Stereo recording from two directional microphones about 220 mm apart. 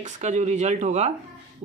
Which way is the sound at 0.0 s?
35° right (ahead or behind).